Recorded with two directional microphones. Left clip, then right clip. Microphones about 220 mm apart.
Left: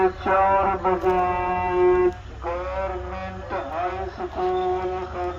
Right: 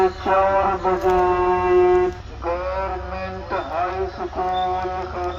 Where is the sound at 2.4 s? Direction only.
25° right (ahead or behind).